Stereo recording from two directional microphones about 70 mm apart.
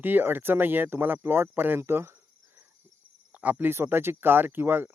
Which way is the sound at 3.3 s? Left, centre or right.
Right.